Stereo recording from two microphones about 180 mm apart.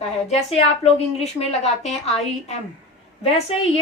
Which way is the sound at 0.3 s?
35° left (ahead or behind).